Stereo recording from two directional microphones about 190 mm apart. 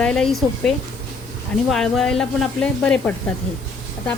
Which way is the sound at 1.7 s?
Centre (ahead or behind).